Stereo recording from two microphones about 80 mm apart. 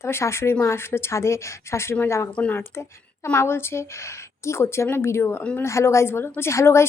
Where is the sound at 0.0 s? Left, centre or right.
Left.